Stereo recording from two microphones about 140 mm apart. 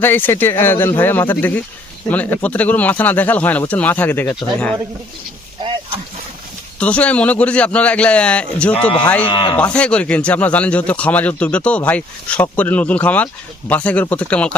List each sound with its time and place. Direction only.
0.0 s speech: 15° left (ahead or behind)
6.7 s speech: 10° left (ahead or behind)
9.2 s speech: 35° left (ahead or behind)
9.7 s speech: 10° left (ahead or behind)